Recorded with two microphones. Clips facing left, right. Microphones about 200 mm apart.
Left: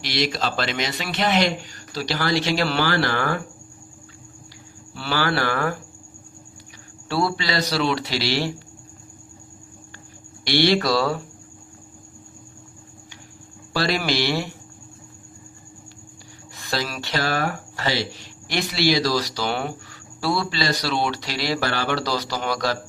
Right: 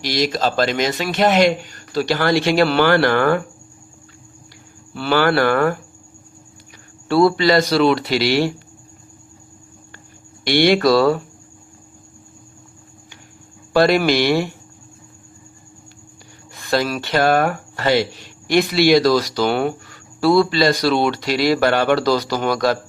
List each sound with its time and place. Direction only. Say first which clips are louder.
0.0 s speech: right 5 dB; 45° right (ahead or behind)
4.9 s speech: right 7 dB; 55° right (ahead or behind)
7.1 s speech: right 10 dB; 50° right (ahead or behind)
10.4 s speech: right 5 dB; 55° right (ahead or behind)
13.7 s speech: right 8 dB; 55° right (ahead or behind)
16.6 s speech: right 8 dB; 55° right (ahead or behind)